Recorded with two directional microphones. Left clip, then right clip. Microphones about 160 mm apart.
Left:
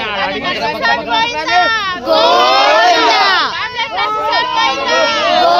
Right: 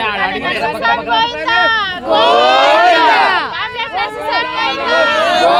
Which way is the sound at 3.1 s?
25° left (ahead or behind).